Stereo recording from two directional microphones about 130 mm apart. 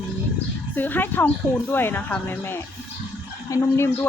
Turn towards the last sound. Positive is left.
turn(degrees=20)  # may be behind; listen again after turning